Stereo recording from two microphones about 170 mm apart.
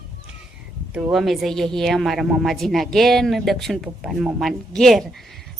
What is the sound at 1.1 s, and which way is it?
Speech, centre (ahead or behind).